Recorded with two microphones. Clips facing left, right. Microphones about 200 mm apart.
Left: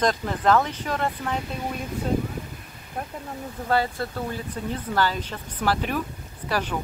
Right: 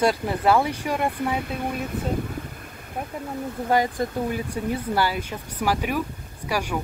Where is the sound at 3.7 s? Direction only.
15° right (ahead or behind).